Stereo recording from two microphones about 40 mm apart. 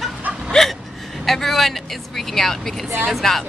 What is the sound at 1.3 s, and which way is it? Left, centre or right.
Speech, centre.